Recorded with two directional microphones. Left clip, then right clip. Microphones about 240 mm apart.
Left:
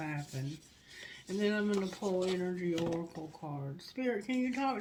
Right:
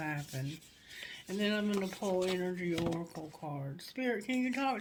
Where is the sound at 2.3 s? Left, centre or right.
Right.